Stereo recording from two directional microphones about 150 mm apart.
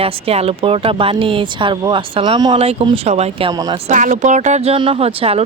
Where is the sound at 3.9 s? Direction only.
55° right (ahead or behind).